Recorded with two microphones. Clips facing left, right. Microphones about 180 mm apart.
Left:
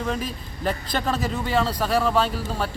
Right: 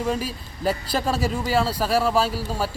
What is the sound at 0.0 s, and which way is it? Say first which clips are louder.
A man's voice: right 2 dB; 5° right (ahead or behind).